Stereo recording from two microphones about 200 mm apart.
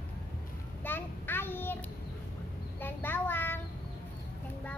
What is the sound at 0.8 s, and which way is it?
Child singing, 10° left (ahead or behind).